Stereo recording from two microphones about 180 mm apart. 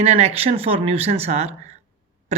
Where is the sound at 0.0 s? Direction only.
35° right (ahead or behind).